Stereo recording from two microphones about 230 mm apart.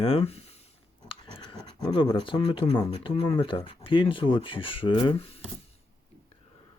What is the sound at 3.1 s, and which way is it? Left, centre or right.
Speech, left.